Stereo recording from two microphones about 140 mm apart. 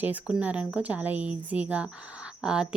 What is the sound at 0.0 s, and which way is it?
Speech, 10° right (ahead or behind).